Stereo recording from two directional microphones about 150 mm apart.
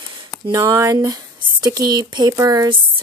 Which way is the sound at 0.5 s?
20° right (ahead or behind).